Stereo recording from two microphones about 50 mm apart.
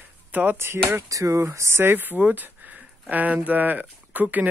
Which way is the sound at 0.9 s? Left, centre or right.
Right.